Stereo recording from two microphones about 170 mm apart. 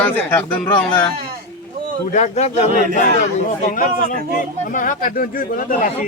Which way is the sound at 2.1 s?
40° left (ahead or behind).